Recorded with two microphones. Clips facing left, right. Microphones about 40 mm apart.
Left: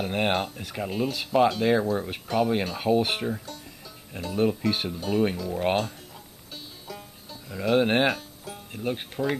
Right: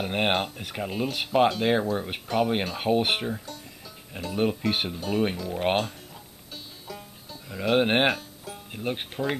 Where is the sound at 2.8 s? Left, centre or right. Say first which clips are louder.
Even; right.